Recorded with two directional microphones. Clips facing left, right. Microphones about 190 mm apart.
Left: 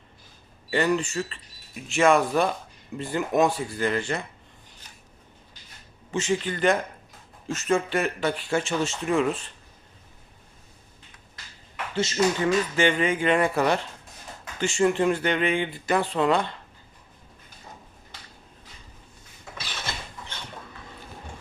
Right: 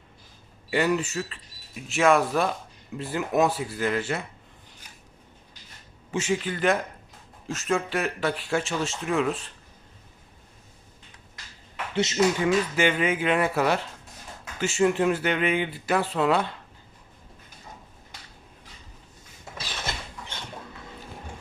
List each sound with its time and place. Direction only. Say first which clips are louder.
0.7 s speech: even; 5° right (ahead or behind)
6.1 s speech: left 1 dB; 10° right (ahead or behind)
11.9 s speech: right 1 dB; 20° right (ahead or behind)
12.5 s speech: even; 5° right (ahead or behind)